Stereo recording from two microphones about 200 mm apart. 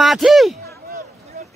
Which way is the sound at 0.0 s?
Centre (ahead or behind).